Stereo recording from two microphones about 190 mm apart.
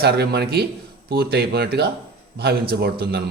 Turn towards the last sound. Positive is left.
turn(degrees=-55)  # may be behind; listen again after turning